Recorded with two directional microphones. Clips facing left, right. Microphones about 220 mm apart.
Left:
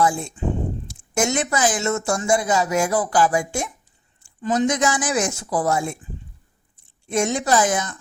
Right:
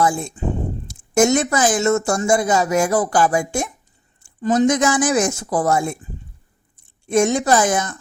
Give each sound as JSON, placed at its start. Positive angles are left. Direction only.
{"t": 0.0, "sound": "speech", "side_deg": -40}
{"t": 7.1, "sound": "speech", "side_deg": -50}